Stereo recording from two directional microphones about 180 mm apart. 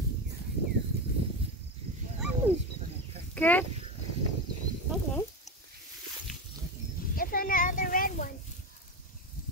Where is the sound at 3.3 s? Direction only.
10° left (ahead or behind).